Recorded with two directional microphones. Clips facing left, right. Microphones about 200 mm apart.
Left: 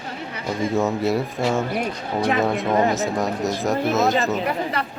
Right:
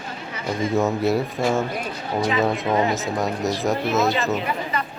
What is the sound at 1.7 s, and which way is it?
Speech, 60° left (ahead or behind).